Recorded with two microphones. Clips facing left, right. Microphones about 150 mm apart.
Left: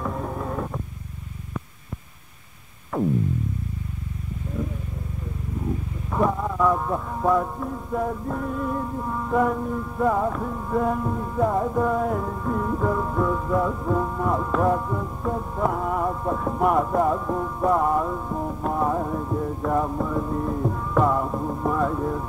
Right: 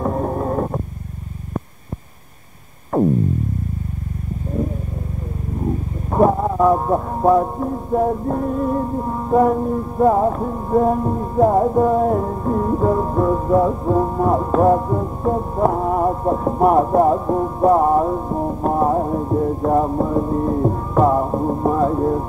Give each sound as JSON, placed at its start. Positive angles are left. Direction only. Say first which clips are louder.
{"t": 0.0, "sound": "a sound", "louder": "right 8 dB", "side_deg": -45}
{"t": 2.9, "sound": "music", "louder": "right 7 dB", "side_deg": -40}
{"t": 5.6, "sound": "roaring cats", "louder": "right 6 dB", "side_deg": -45}